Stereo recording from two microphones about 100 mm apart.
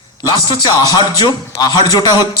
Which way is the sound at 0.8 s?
45° left (ahead or behind).